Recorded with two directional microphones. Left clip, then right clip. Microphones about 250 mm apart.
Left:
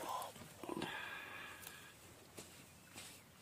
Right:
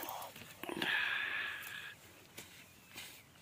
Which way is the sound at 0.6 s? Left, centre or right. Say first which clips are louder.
Right 10 dB; centre.